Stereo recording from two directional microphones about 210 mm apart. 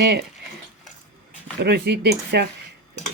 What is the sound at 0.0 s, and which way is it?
Speech, 55° right (ahead or behind).